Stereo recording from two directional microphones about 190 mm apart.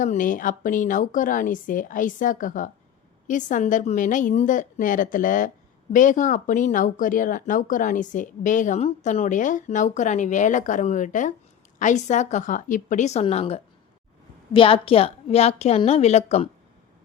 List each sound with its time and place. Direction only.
0.0 s speech: 45° left (ahead or behind)